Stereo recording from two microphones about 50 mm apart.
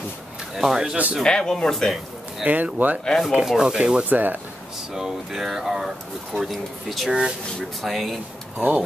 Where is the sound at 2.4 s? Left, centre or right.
Right.